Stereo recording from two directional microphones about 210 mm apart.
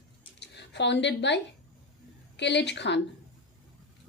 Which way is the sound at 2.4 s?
55° left (ahead or behind).